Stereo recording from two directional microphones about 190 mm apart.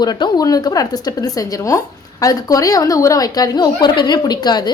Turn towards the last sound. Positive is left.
turn(degrees=20)  # may be behind; listen again after turning